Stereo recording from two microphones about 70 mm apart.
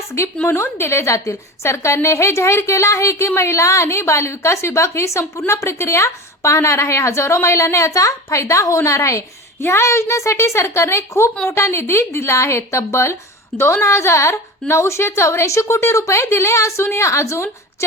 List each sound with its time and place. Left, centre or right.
0.4 s a woman's voice: left
9.6 s a woman's voice: left